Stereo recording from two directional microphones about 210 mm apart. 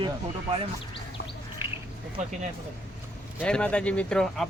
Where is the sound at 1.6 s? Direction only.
10° right (ahead or behind).